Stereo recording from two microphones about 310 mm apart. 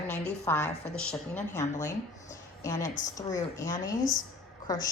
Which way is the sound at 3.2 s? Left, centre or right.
Centre.